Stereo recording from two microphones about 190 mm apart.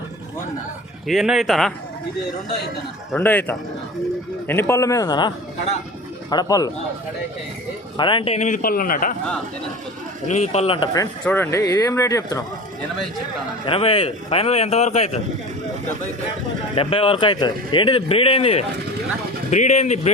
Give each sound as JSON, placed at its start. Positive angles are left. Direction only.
{"t": 1.0, "sound": "speech", "side_deg": 0}
{"t": 3.1, "sound": "speech", "side_deg": 10}
{"t": 6.3, "sound": "speech", "side_deg": 20}
{"t": 7.9, "sound": "a man's voice", "side_deg": 25}
{"t": 10.2, "sound": "a man's voice", "side_deg": 35}
{"t": 10.9, "sound": "speech", "side_deg": 15}
{"t": 13.7, "sound": "a man's voice", "side_deg": 30}
{"t": 16.7, "sound": "a man's voice", "side_deg": 30}